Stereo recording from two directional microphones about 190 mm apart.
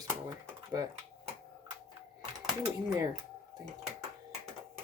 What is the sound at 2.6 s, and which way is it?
Speech, 20° right (ahead or behind).